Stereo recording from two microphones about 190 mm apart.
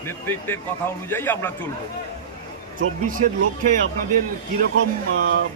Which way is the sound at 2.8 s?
45° right (ahead or behind).